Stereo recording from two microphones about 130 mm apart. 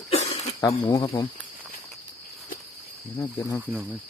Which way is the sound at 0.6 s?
30° left (ahead or behind).